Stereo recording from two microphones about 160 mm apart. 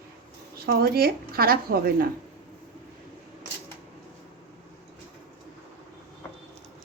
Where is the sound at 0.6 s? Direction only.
70° right (ahead or behind).